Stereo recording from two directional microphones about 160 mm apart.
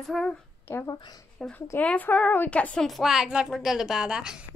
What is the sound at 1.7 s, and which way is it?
A woman's voice, 10° left (ahead or behind).